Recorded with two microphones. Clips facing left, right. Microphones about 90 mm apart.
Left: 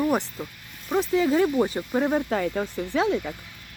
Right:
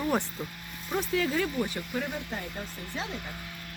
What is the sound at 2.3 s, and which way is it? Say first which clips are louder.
Speech: left 12 dB; 90° left.